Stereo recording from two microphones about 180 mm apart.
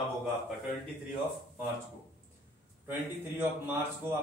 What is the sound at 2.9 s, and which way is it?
A man's voice, 10° right (ahead or behind).